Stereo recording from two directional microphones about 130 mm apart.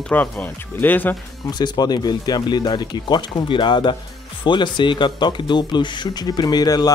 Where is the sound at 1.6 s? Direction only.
30° left (ahead or behind).